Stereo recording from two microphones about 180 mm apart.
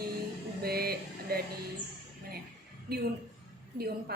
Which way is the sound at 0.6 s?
60° right (ahead or behind).